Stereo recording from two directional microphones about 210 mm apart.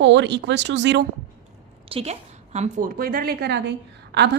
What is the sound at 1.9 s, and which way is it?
A woman's voice, 30° right (ahead or behind).